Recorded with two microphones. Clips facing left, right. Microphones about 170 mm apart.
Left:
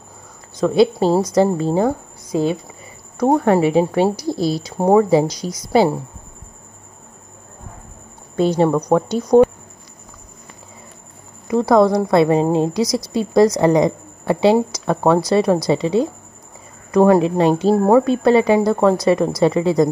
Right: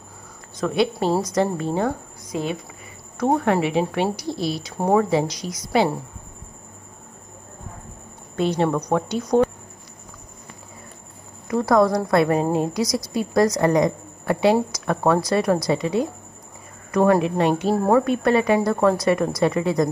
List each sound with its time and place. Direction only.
0.6 s speech: 30° left (ahead or behind)
3.2 s speech: 35° left (ahead or behind)
8.4 s speech: 35° left (ahead or behind)
11.4 s a woman's voice: 20° left (ahead or behind)